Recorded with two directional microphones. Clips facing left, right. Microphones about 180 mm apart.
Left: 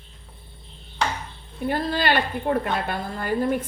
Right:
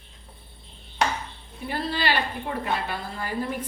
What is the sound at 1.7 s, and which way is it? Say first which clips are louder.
A woman's voice: left 4 dB; 50° left (ahead or behind).